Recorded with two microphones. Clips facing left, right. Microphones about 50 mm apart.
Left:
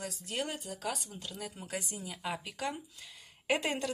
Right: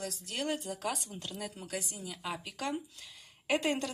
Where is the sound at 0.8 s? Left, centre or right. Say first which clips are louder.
Left 2 dB; centre.